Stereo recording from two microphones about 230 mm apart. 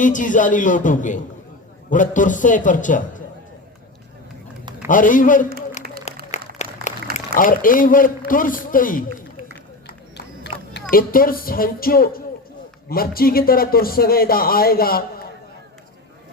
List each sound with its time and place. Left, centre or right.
0.0 s speech: left
4.9 s speech: left
6.1 s applause: left
7.0 s a sound: right
7.3 s speech: left
10.2 s music: left
10.9 s speech: left